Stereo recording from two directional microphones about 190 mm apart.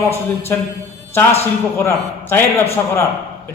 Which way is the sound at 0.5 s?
10° left (ahead or behind).